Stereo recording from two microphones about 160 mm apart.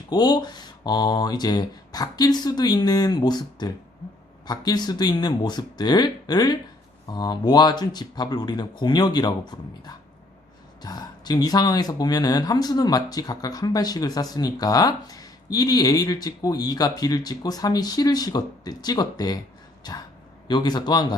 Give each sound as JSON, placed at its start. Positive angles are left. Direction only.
{"t": 0.1, "sound": "speech", "side_deg": 25}